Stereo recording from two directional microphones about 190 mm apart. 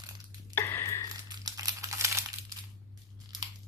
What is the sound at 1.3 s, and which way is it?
Crumpling, 20° right (ahead or behind).